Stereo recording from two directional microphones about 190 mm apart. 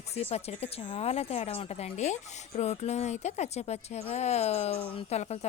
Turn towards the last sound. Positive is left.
turn(degrees=35)  # may be behind; listen again after turning